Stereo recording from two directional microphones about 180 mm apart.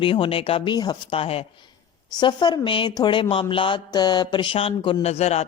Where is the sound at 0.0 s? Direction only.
30° left (ahead or behind).